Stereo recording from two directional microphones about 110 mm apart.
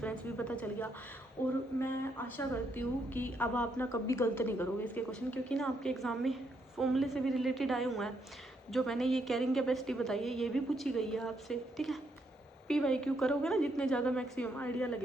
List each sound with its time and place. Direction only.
0.0 s a woman's voice: 10° left (ahead or behind)
5.5 s a woman's voice: 5° left (ahead or behind)